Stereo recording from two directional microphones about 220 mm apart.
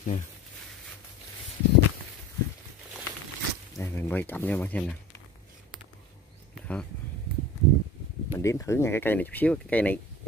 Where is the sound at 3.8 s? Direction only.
10° left (ahead or behind).